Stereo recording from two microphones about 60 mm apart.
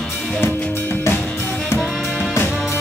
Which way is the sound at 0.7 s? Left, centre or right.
Left.